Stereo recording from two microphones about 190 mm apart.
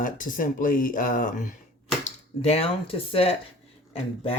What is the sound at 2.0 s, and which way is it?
Speech, 30° left (ahead or behind).